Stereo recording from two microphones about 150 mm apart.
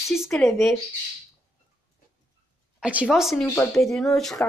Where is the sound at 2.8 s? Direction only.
5° right (ahead or behind).